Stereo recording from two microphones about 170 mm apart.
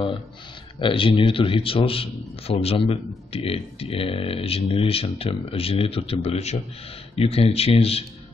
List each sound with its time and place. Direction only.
0.7 s speech: 30° left (ahead or behind)